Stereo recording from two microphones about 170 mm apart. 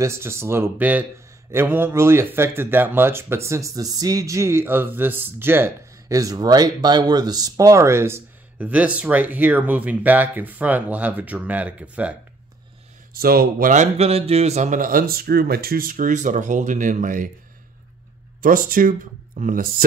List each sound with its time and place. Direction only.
0.0 s speech: 15° right (ahead or behind)
13.1 s a man's voice: 60° right (ahead or behind)
18.4 s a man's voice: 55° right (ahead or behind)